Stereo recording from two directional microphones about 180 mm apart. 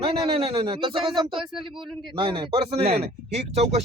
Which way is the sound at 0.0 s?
35° right (ahead or behind).